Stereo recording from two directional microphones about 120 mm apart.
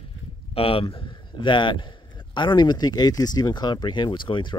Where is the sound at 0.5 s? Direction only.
50° left (ahead or behind).